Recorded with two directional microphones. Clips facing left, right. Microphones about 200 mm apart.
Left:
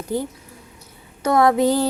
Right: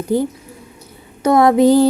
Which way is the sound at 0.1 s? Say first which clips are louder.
Right 7 dB; 15° right (ahead or behind).